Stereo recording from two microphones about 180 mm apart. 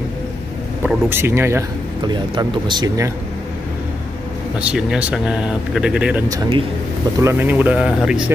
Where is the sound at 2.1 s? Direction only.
25° right (ahead or behind).